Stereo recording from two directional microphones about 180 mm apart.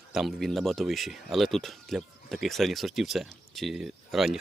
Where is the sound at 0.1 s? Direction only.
Centre (ahead or behind).